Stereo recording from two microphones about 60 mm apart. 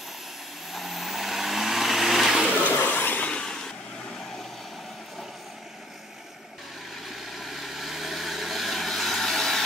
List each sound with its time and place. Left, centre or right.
0.7 s vehicle: centre
2.6 s a sound: left
3.3 s vehicle: centre
7.1 s vehicle: centre